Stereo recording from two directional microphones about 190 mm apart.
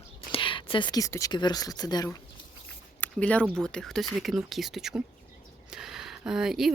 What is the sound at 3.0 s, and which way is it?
Speech, 5° left (ahead or behind).